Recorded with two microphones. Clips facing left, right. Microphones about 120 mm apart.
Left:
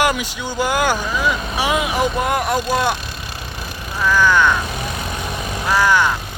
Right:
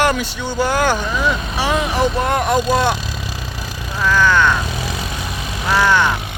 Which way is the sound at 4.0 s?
10° left (ahead or behind).